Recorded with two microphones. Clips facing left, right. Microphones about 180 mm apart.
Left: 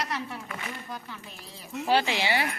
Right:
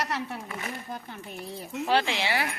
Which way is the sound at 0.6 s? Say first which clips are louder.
Right 2 dB; 50° right (ahead or behind).